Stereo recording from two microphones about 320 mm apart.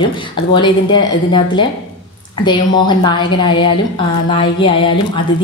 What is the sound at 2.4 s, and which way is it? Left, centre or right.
A woman's voice, centre.